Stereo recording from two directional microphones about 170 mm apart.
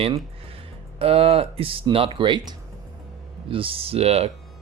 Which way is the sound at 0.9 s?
35° right (ahead or behind).